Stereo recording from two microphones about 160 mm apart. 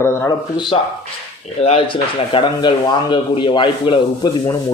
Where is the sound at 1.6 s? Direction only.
35° left (ahead or behind).